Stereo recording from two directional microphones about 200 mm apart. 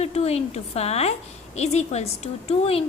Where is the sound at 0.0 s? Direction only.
30° left (ahead or behind).